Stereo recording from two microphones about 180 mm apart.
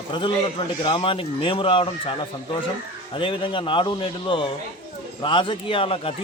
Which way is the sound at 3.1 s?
30° left (ahead or behind).